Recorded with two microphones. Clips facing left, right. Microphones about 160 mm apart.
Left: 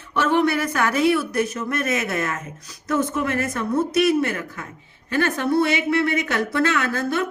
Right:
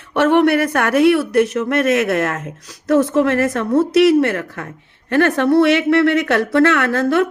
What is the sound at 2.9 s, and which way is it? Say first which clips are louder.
Speech: right 8 dB; 90° right.